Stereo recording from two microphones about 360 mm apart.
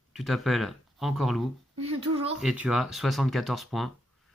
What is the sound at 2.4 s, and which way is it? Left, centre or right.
Speech, centre.